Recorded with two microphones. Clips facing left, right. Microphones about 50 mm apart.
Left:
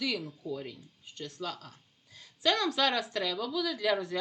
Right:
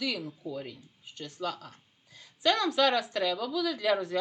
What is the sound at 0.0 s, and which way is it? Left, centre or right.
Speech, centre.